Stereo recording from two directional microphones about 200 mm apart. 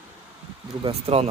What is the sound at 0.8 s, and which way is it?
Speech, 30° right (ahead or behind).